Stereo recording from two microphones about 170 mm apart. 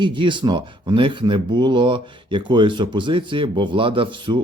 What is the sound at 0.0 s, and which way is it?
Speech, 30° right (ahead or behind).